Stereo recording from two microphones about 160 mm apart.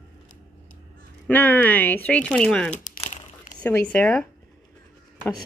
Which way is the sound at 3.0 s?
50° left (ahead or behind).